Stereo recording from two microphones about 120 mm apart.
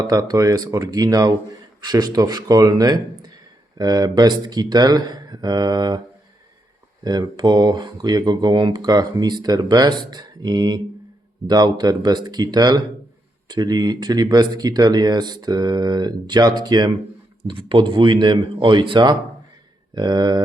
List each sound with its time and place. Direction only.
0.0 s speech: 30° right (ahead or behind)
7.0 s speech: 35° right (ahead or behind)